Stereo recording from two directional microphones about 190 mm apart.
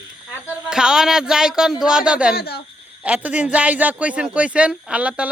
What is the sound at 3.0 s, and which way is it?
A man's voice, 5° right (ahead or behind).